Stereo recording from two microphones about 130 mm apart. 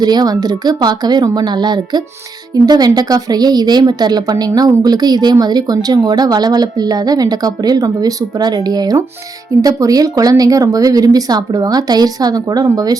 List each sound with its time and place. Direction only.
0.0 s a woman's voice: 30° right (ahead or behind)